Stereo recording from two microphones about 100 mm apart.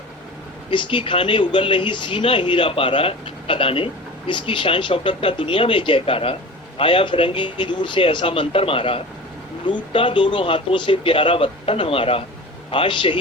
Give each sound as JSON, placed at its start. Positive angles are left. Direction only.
{"t": 0.7, "sound": "speech", "side_deg": 55}